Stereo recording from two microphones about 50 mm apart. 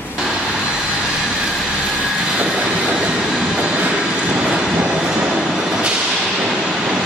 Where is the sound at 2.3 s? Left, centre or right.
Right.